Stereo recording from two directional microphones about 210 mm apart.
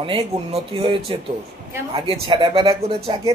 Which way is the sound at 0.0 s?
25° right (ahead or behind).